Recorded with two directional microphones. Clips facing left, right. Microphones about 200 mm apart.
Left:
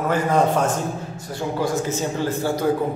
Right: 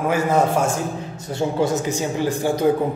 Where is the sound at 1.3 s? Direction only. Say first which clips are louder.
Right 3 dB; 20° right (ahead or behind).